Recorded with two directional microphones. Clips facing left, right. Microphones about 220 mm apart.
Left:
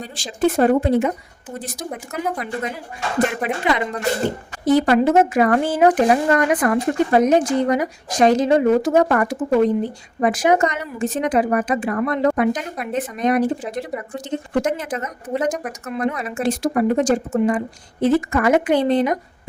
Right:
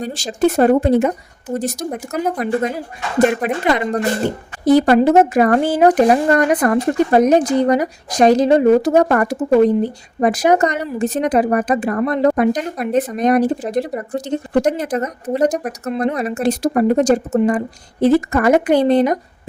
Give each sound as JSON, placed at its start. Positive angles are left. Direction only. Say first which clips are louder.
{"t": 0.0, "sound": "speech", "louder": "right 3 dB", "side_deg": -40}